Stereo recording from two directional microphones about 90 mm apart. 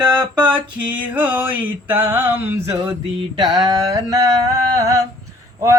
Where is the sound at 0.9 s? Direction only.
15° right (ahead or behind).